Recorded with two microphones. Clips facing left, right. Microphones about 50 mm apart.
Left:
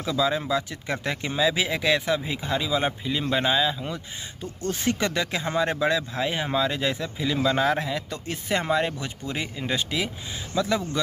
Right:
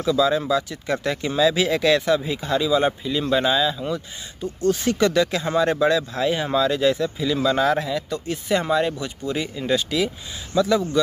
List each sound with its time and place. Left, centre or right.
0.0 s speech: left
4.4 s speech: left